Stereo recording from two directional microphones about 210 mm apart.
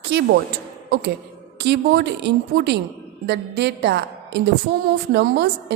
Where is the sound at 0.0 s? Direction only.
55° right (ahead or behind).